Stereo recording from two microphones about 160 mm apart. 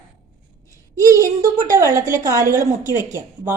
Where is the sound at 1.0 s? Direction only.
20° right (ahead or behind).